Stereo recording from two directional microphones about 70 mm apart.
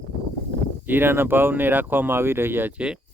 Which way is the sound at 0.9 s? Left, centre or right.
Right.